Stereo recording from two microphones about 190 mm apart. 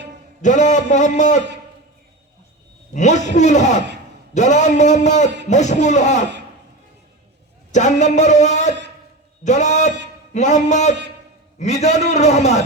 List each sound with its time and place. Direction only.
0.4 s speech: 40° left (ahead or behind)
2.9 s speech: 40° left (ahead or behind)
7.7 s speech: 40° left (ahead or behind)